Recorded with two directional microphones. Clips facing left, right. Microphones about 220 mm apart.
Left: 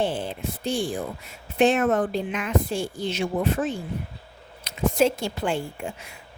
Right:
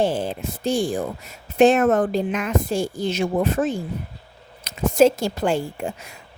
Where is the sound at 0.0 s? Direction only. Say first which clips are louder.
Right 4 dB; 40° right (ahead or behind).